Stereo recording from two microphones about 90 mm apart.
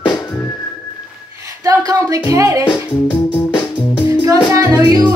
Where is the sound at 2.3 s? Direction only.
40° right (ahead or behind).